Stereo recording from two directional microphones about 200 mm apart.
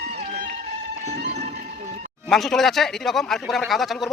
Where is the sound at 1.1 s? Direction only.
35° right (ahead or behind).